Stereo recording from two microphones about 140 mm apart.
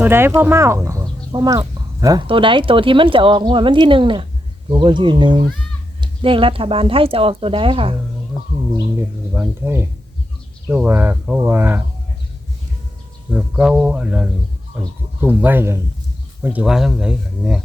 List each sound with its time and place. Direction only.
0.0 s speech: 15° right (ahead or behind)
2.2 s speech: 40° right (ahead or behind)
9.3 s speech: 15° right (ahead or behind)
13.3 s speech: 5° right (ahead or behind)